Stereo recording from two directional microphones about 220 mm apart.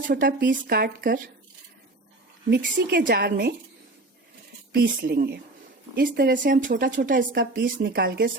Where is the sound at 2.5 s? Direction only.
45° right (ahead or behind).